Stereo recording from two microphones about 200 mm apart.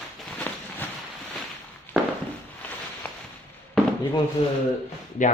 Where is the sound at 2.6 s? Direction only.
10° left (ahead or behind).